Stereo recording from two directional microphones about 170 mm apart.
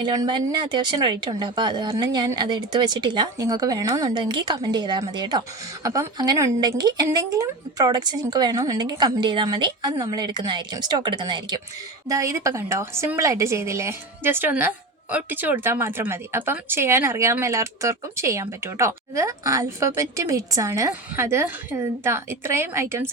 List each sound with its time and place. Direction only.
0.0 s a woman's voice: 25° right (ahead or behind)